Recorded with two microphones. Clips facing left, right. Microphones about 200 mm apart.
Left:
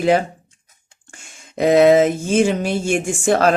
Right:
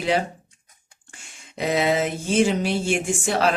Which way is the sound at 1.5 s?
50° left (ahead or behind).